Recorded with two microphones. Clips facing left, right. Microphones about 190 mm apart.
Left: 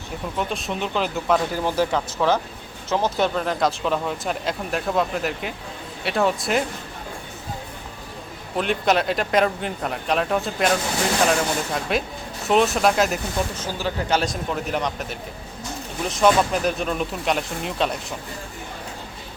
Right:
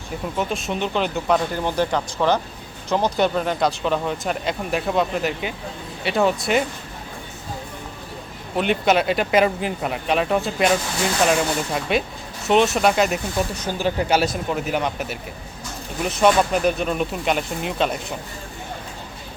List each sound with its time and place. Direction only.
0.3 s speech: centre (ahead or behind)
8.5 s speech: centre (ahead or behind)
13.6 s speech: 15° right (ahead or behind)